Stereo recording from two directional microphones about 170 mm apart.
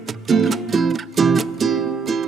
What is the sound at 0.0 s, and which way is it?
Music, centre (ahead or behind).